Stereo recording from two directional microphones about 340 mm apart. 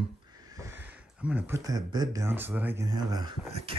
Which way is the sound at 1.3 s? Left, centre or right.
Centre.